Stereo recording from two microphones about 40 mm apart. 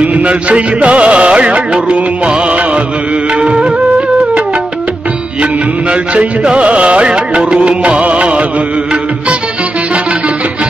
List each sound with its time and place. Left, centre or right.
0.0 s music: right
5.4 s music: right